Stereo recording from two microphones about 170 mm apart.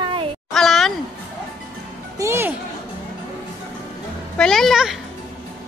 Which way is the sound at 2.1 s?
15° right (ahead or behind).